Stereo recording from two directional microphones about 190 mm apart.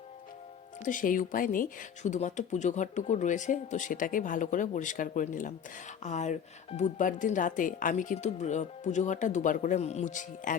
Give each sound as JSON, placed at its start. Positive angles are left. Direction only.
{"t": 0.9, "sound": "speech", "side_deg": 45}